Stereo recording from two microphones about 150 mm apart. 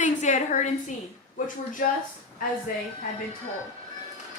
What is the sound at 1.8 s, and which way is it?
Speech, 70° left (ahead or behind).